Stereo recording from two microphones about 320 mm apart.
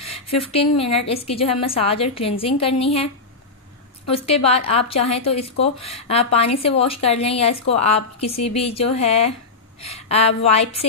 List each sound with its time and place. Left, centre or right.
0.4 s a woman's voice: centre
4.1 s a woman's voice: centre